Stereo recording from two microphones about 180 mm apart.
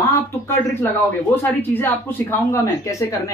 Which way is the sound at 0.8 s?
10° left (ahead or behind).